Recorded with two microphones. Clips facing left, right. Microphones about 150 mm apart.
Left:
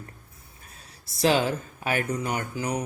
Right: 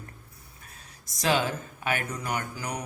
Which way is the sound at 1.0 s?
30° left (ahead or behind).